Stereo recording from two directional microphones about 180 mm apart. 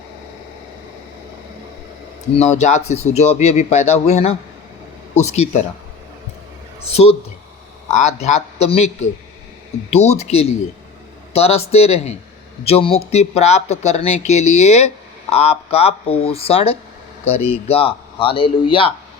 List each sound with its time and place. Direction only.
2.3 s speech: 40° left (ahead or behind)
6.8 s speech: 35° left (ahead or behind)
11.3 s speech: 35° left (ahead or behind)